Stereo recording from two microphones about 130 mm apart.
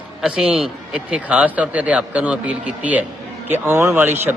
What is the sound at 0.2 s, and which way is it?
A man's voice, 5° right (ahead or behind).